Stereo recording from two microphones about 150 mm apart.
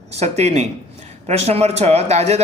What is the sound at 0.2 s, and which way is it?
A man's voice, 45° right (ahead or behind).